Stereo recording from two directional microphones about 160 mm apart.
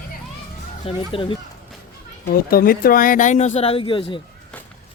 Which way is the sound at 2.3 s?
65° left (ahead or behind).